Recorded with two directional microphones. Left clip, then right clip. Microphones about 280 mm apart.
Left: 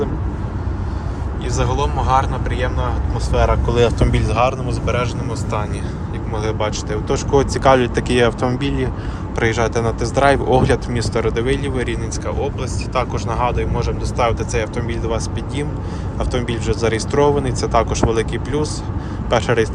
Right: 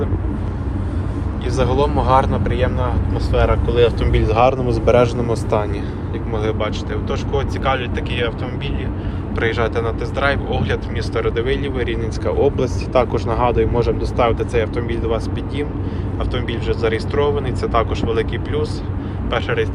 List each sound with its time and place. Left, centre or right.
1.5 s speech: centre
6.3 s speech: centre
9.3 s speech: left
19.3 s speech: left